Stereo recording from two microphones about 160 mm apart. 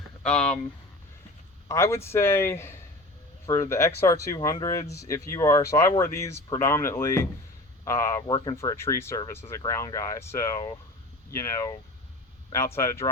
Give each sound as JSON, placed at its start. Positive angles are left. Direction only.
{"t": 0.2, "sound": "speech", "side_deg": 5}
{"t": 1.6, "sound": "speech", "side_deg": 15}